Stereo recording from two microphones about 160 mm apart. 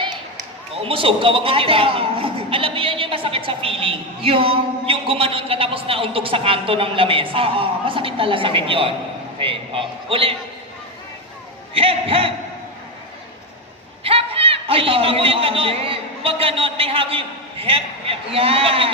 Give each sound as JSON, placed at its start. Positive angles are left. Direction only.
{"t": 0.8, "sound": "speech", "side_deg": -35}
{"t": 11.7, "sound": "speech", "side_deg": -35}
{"t": 14.0, "sound": "a man's voice", "side_deg": -35}